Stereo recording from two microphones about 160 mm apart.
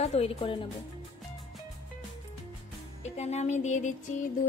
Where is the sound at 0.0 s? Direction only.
40° left (ahead or behind).